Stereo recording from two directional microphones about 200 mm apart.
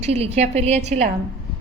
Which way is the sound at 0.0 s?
30° right (ahead or behind).